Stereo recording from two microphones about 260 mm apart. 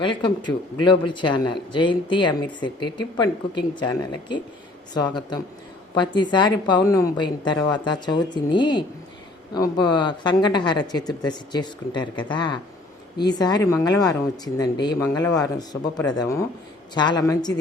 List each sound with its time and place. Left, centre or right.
0.0 s speech: centre